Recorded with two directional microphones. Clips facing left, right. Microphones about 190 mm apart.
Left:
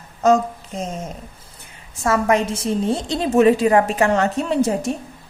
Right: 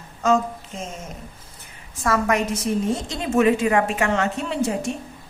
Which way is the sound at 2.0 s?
30° left (ahead or behind).